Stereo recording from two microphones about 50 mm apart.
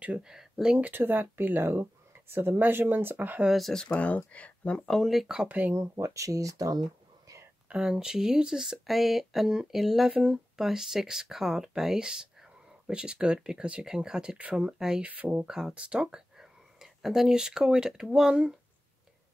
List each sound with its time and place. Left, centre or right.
0.2 s speech: centre
0.9 s speech: right
1.7 s speech: right
3.9 s speech: left
4.7 s speech: centre
5.0 s speech: centre
5.5 s speech: right
5.8 s speech: right
7.7 s speech: centre
15.0 s speech: right
15.4 s speech: centre
16.3 s speech: centre